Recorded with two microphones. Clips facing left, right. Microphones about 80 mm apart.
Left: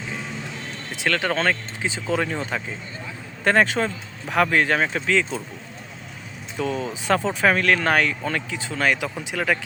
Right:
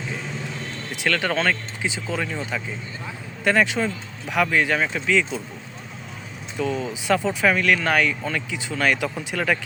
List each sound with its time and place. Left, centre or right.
0.9 s speech: left
6.6 s speech: left
8.8 s speech: left